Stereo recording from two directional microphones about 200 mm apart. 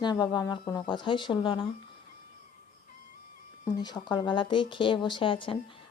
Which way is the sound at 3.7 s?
20° left (ahead or behind).